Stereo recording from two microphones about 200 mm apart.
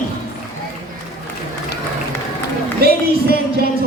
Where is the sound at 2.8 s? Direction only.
50° right (ahead or behind).